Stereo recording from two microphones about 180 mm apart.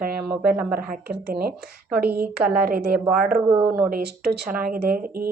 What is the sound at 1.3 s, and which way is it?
Speech, 55° right (ahead or behind).